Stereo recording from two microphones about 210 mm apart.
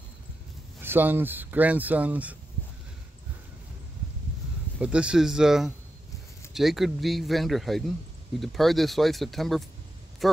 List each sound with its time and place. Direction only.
0.7 s speech: 10° right (ahead or behind)
4.7 s speech: 5° right (ahead or behind)